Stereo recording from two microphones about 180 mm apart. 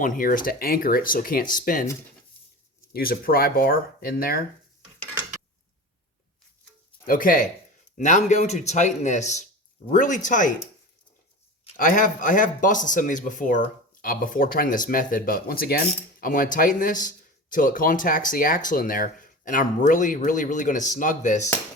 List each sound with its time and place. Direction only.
0.0 s speech: 50° left (ahead or behind)
2.9 s speech: 55° left (ahead or behind)
7.1 s speech: 50° left (ahead or behind)
11.8 s speech: 50° left (ahead or behind)